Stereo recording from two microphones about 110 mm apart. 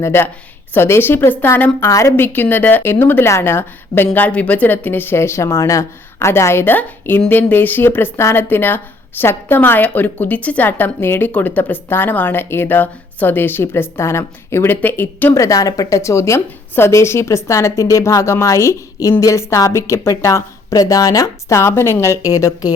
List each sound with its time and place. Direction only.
0.0 s a woman's voice: 20° left (ahead or behind)
15.3 s a woman's voice: 30° left (ahead or behind)